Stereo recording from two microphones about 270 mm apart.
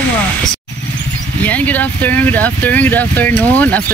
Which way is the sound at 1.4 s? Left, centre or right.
Centre.